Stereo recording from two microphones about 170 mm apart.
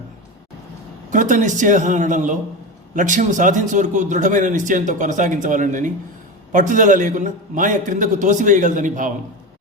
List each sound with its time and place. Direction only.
1.1 s a man's voice: 50° right (ahead or behind)